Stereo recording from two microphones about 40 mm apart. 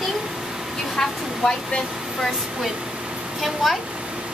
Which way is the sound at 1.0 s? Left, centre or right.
Centre.